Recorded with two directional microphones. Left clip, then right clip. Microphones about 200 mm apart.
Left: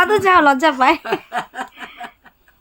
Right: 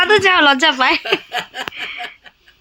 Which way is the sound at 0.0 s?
5° left (ahead or behind).